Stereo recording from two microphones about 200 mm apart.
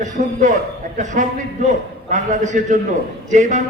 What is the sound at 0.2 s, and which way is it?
A man's voice, 35° right (ahead or behind).